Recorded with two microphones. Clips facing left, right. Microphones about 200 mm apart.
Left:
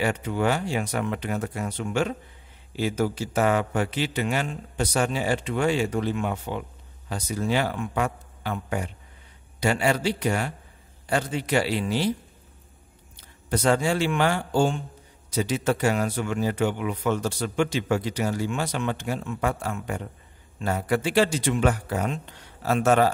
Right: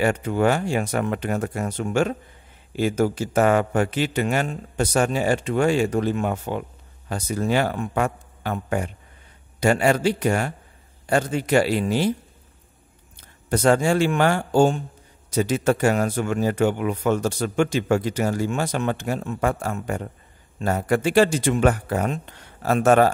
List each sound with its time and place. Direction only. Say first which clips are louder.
0.0 s speech: right 4 dB; 50° right (ahead or behind)
13.1 s a man's voice: right 3 dB; 50° right (ahead or behind)